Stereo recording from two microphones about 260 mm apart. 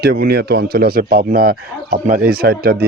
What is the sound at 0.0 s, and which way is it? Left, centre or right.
A man's voice, right.